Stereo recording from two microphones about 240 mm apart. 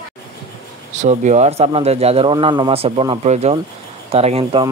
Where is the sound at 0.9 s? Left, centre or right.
Right.